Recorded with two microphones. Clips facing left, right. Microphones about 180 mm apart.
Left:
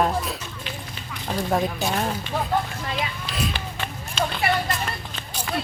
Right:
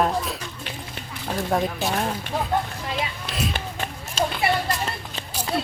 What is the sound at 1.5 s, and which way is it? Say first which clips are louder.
Speech: even; centre (ahead or behind).